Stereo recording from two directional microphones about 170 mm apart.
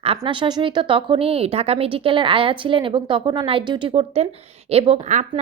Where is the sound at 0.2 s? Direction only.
25° right (ahead or behind).